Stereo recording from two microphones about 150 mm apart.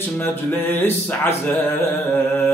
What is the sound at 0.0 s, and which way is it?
Music, 10° left (ahead or behind).